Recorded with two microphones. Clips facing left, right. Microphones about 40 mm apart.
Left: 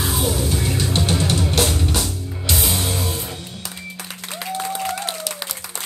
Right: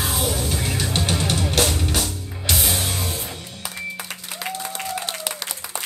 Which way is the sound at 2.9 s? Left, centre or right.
Left.